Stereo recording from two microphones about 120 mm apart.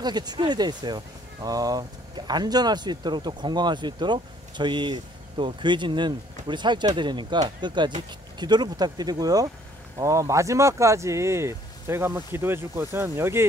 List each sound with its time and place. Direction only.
0.0 s speech: 35° right (ahead or behind)